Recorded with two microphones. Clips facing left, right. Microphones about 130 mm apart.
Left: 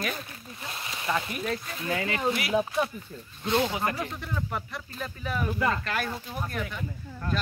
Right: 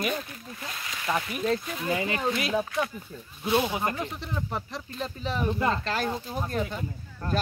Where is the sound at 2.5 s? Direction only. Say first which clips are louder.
Left 2 dB; 25° left (ahead or behind).